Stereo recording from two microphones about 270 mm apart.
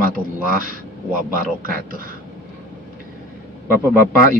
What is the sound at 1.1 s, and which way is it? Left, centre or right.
Speech, right.